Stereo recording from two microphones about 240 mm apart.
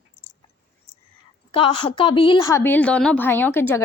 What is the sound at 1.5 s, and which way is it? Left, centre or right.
A woman's voice, left.